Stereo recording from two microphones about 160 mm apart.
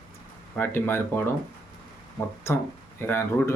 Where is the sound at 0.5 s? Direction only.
15° left (ahead or behind).